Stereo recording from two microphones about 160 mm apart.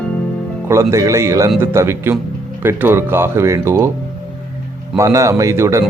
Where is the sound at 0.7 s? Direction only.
20° right (ahead or behind).